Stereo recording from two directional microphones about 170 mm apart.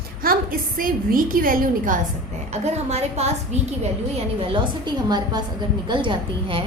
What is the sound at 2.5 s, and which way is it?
Speech, 40° right (ahead or behind).